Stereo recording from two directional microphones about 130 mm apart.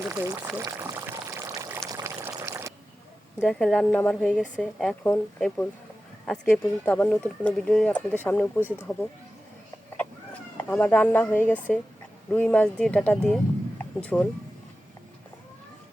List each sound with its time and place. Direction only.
0.0 s speech: 25° right (ahead or behind)
0.5 s pour: 20° right (ahead or behind)
2.2 s a sound: 20° right (ahead or behind)
3.4 s a woman's voice: 5° left (ahead or behind)
5.0 s a woman's voice: 15° left (ahead or behind)
6.6 s speech: 15° left (ahead or behind)
10.6 s speech: 10° left (ahead or behind)